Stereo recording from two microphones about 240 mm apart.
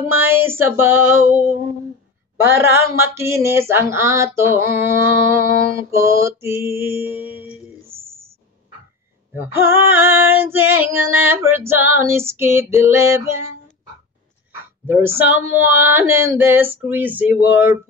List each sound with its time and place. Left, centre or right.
0.0 s female singing: centre
7.9 s a sound: right
9.3 s female singing: centre
14.9 s female singing: centre